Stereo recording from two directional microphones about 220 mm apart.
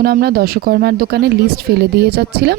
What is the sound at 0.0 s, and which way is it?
A woman's voice, 45° right (ahead or behind).